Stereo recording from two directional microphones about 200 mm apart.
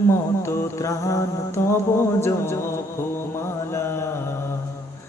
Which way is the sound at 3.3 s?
15° left (ahead or behind).